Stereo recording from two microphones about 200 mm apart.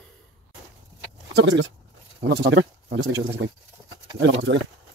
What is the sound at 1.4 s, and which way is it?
Speech, 65° right (ahead or behind).